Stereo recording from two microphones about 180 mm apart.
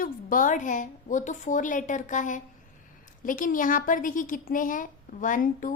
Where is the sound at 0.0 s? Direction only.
45° left (ahead or behind).